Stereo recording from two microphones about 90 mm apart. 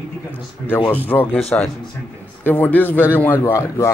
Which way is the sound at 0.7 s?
20° left (ahead or behind).